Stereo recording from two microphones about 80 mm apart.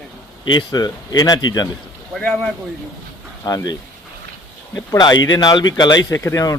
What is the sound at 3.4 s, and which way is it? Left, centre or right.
Speech, left.